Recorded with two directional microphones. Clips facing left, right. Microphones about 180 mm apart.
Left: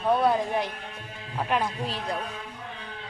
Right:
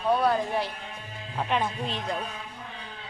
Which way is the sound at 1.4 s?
5° left (ahead or behind).